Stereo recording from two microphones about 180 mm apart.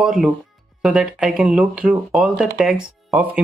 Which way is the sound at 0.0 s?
5° right (ahead or behind).